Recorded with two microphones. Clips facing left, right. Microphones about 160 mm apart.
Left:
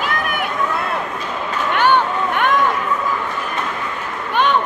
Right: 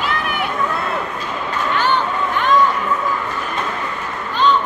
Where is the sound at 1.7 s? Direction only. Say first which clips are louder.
Left 4 dB; 60° left (ahead or behind).